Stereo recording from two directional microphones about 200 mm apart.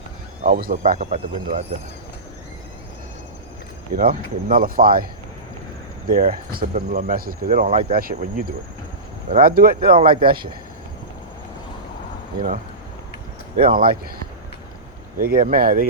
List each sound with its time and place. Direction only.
0.4 s speech: 40° right (ahead or behind)
3.9 s speech: 45° right (ahead or behind)
6.1 s speech: 45° right (ahead or behind)
7.7 s speech: 25° right (ahead or behind)
7.9 s speech: 45° right (ahead or behind)
9.3 s speech: 45° right (ahead or behind)
9.9 s speech: 25° right (ahead or behind)
13.7 s speech: 45° right (ahead or behind)
15.2 s speech: 45° right (ahead or behind)